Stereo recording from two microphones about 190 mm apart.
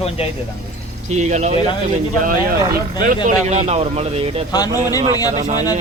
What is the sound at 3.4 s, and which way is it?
Speech, 35° right (ahead or behind).